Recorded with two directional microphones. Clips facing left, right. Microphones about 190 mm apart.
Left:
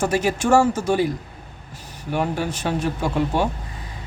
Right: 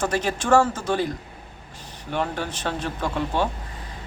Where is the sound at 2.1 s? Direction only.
10° left (ahead or behind).